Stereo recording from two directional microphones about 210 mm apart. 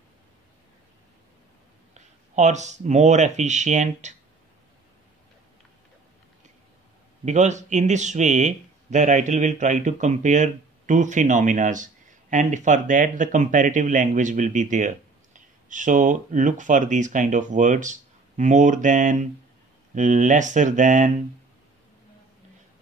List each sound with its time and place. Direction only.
2.0 s speech: 35° right (ahead or behind)
7.2 s speech: 35° right (ahead or behind)